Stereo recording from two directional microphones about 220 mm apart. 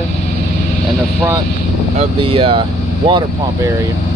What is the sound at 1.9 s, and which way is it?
Speech, 25° right (ahead or behind).